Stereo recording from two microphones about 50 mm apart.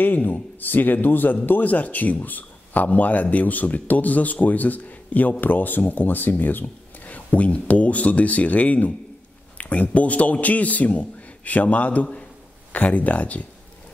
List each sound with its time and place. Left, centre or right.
0.0 s a man's voice: left